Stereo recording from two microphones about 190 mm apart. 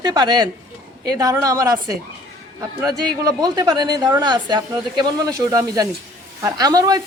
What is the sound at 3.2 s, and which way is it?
A woman's voice, 20° right (ahead or behind).